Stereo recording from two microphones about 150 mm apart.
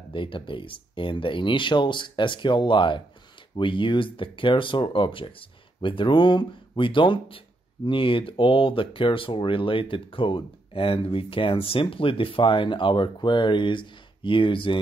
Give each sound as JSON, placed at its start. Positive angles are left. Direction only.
{"t": 0.1, "sound": "speech", "side_deg": 35}